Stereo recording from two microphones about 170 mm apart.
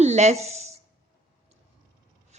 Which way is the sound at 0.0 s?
40° right (ahead or behind).